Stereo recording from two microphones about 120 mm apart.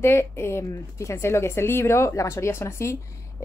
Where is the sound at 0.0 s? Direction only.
20° left (ahead or behind).